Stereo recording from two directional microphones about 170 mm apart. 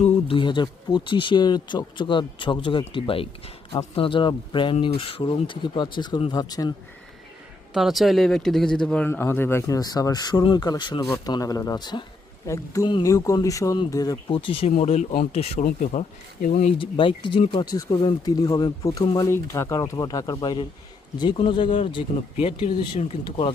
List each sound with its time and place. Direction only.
0.0 s speech: 30° left (ahead or behind)
7.7 s a man's voice: centre (ahead or behind); by 16.7 s 50° left (ahead or behind)
16.7 s speech: 30° left (ahead or behind)